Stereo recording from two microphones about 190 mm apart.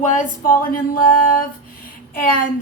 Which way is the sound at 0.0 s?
40° left (ahead or behind).